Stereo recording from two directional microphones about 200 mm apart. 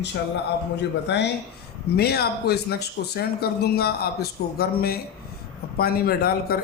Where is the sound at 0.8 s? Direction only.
60° left (ahead or behind).